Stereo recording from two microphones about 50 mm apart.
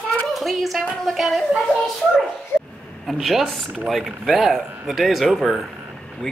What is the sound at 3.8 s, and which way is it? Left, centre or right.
Speech, centre.